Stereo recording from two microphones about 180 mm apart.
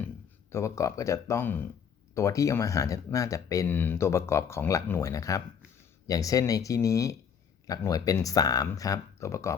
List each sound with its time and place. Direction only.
0.5 s speech: 15° left (ahead or behind)